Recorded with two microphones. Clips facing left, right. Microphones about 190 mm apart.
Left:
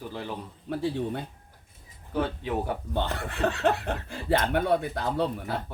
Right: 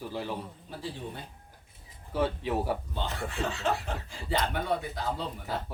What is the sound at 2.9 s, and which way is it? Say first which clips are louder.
Speech: left 4 dB; 60° left (ahead or behind).